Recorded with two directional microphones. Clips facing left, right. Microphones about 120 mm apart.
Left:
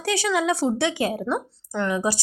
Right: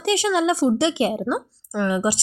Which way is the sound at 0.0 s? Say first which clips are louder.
Right 3 dB; 20° right (ahead or behind).